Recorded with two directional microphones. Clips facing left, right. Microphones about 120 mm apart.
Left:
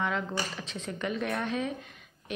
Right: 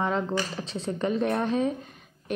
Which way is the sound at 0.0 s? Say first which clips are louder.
Right 5 dB; 35° right (ahead or behind).